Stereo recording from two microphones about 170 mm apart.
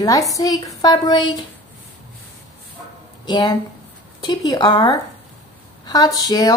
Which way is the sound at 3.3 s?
25° left (ahead or behind).